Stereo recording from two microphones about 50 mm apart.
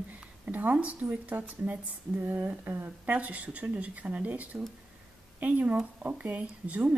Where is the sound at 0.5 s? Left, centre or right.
Right.